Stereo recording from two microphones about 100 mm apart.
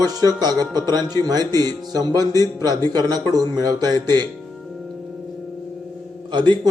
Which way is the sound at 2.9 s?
40° right (ahead or behind).